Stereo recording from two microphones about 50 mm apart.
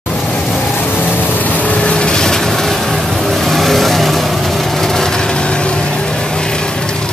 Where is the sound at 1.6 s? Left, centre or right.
Left.